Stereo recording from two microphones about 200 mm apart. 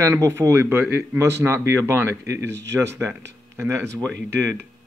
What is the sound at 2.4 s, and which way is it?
Speech, 60° right (ahead or behind).